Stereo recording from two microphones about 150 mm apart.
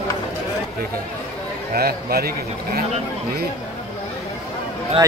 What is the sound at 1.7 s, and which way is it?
Speech, 90° right.